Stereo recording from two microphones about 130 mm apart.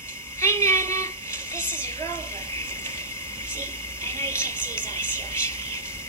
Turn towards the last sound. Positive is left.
turn(degrees=20)  # may be behind; listen again after turning